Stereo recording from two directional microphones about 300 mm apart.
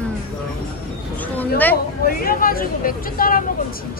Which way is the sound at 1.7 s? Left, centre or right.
Left.